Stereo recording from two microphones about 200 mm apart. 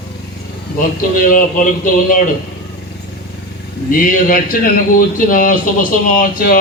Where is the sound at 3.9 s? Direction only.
45° left (ahead or behind).